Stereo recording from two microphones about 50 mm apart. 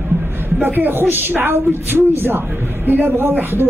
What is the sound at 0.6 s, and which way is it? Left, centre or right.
A man's voice, right.